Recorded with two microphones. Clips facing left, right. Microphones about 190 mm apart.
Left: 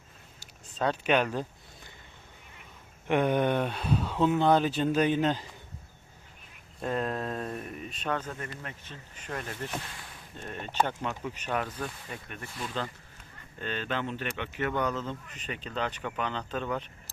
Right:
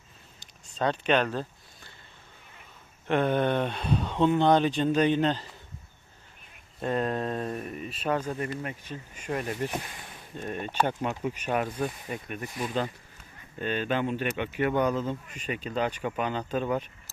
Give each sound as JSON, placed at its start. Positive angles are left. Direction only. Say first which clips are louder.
{"t": 0.3, "sound": "a sound", "louder": "right 1 dB", "side_deg": 5}
{"t": 3.1, "sound": "speech", "louder": "right 1 dB", "side_deg": 15}
{"t": 6.8, "sound": "speech", "louder": "right 3 dB", "side_deg": 0}